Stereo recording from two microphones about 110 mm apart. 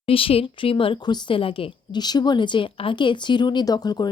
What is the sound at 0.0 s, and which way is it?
Speech, 55° left (ahead or behind).